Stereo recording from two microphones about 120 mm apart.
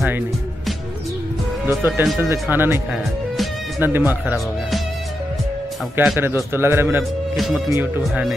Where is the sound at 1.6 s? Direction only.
20° right (ahead or behind).